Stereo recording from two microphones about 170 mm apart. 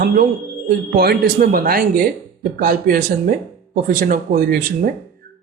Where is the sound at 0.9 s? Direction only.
65° right (ahead or behind).